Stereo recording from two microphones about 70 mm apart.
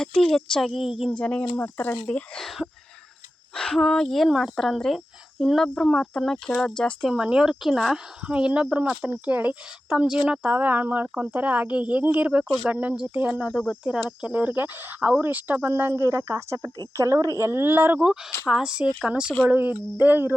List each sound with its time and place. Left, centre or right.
0.0 s a woman's voice: centre
1.1 s speech: centre
2.3 s a woman's voice: centre
4.3 s speech: centre
4.5 s a woman's voice: centre
7.1 s speech: centre
8.3 s speech: centre
13.6 s speech: centre
14.2 s speech: centre
15.6 s a woman's voice: right
18.0 s speech: centre
19.5 s speech: right